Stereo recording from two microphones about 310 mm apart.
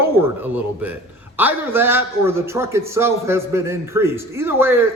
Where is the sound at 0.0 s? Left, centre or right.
Centre.